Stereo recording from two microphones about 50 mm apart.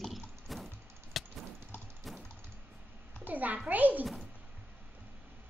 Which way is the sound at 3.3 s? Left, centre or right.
Right.